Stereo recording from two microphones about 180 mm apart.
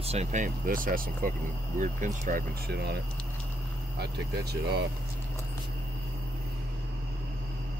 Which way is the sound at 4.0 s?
65° right (ahead or behind).